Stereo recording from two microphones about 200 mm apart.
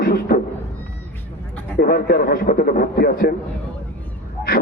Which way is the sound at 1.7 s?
50° left (ahead or behind).